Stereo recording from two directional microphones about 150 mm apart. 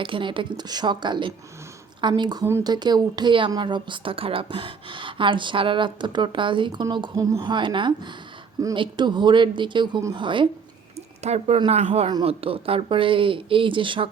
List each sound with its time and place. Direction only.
0.0 s a woman's voice: 35° right (ahead or behind)
2.5 s speech: 15° right (ahead or behind)
2.7 s a woman's voice: 30° right (ahead or behind)
11.2 s speech: 45° right (ahead or behind)
12.2 s a woman's voice: 40° right (ahead or behind)